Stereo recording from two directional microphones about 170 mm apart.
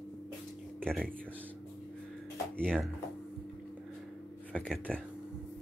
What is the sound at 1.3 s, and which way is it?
Speech, 10° right (ahead or behind).